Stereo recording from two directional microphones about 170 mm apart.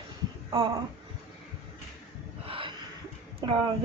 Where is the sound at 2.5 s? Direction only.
30° right (ahead or behind).